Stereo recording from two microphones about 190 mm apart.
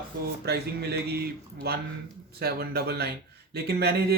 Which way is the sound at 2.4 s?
55° right (ahead or behind).